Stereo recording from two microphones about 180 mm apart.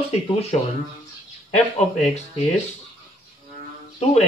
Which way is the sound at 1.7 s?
40° left (ahead or behind).